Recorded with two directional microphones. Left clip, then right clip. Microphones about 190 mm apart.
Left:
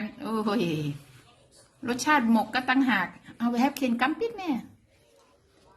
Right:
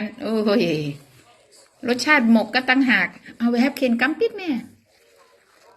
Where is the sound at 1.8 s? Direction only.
30° left (ahead or behind).